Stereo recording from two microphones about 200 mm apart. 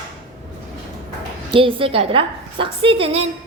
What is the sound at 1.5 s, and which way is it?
A woman's voice, 25° right (ahead or behind).